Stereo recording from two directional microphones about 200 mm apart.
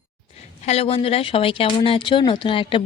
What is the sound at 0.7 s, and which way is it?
Speech, 30° left (ahead or behind).